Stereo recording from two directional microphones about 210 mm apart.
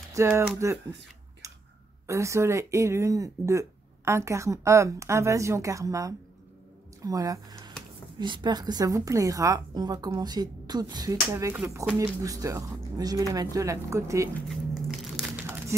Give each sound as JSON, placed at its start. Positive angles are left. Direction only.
{"t": 0.1, "sound": "speech", "side_deg": -15}
{"t": 2.0, "sound": "a woman's voice", "side_deg": -15}
{"t": 11.8, "sound": "speech", "side_deg": 0}
{"t": 12.2, "sound": "speech", "side_deg": -15}
{"t": 14.9, "sound": "a sound", "side_deg": -10}